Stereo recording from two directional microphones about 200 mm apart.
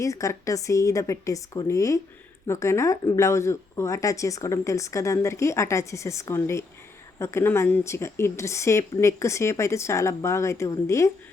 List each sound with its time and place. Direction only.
0.0 s speech: 15° left (ahead or behind)